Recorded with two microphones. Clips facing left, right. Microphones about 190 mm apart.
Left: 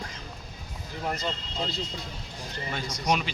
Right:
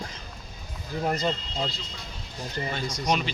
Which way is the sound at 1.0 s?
40° right (ahead or behind).